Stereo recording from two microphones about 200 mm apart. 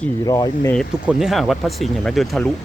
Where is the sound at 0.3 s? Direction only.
20° left (ahead or behind).